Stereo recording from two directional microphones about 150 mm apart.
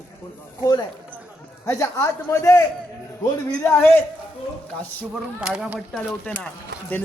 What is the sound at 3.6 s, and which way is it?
Speech, 15° left (ahead or behind).